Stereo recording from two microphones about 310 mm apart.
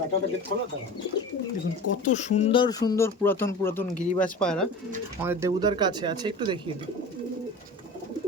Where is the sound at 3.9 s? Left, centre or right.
Left.